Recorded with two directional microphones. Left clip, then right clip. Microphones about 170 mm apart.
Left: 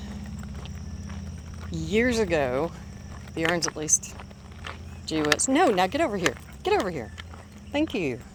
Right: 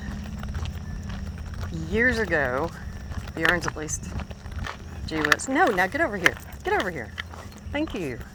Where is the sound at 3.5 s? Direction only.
35° left (ahead or behind).